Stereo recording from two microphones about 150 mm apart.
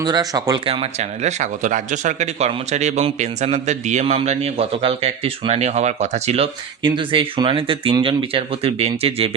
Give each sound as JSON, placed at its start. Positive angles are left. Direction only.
{"t": 0.0, "sound": "speech", "side_deg": -25}